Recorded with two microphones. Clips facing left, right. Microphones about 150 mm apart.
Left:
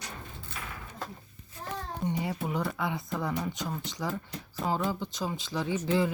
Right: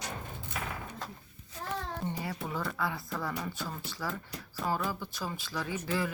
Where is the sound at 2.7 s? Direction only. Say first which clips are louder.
Left 2 dB; 20° left (ahead or behind).